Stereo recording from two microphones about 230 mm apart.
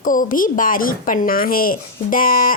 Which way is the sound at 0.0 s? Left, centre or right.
Left.